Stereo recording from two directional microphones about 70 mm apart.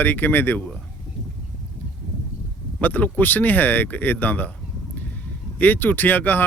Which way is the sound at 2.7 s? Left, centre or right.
Left.